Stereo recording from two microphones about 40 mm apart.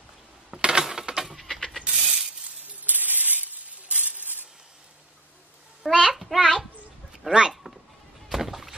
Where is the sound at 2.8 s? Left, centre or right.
Right.